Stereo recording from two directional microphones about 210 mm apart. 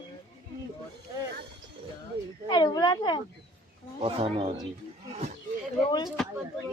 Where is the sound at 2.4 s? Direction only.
20° left (ahead or behind).